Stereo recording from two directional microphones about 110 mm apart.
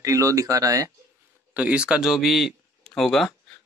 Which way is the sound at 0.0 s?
30° right (ahead or behind).